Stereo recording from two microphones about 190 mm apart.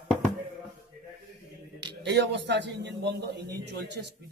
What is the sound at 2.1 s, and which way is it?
A man's voice, 65° right (ahead or behind).